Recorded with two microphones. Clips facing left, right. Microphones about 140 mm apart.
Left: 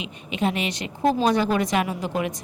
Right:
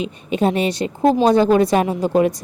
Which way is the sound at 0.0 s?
40° right (ahead or behind).